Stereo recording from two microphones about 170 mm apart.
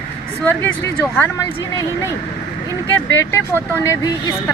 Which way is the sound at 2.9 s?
15° left (ahead or behind).